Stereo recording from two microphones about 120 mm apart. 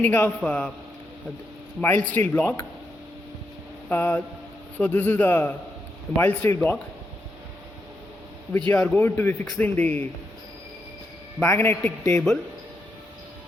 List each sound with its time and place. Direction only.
0.0 s a man's voice: 15° left (ahead or behind)
1.8 s a man's voice: 15° left (ahead or behind)
3.8 s a man's voice: 15° left (ahead or behind)
8.5 s a man's voice: 15° left (ahead or behind)
11.3 s a man's voice: 20° left (ahead or behind)
12.1 s speech: 5° left (ahead or behind)